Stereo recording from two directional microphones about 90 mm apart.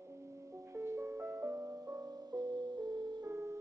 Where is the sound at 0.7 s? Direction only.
30° right (ahead or behind); by 3.3 s 55° right (ahead or behind).